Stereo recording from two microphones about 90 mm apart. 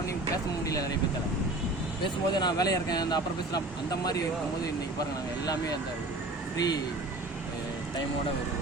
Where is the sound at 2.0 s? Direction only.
55° left (ahead or behind).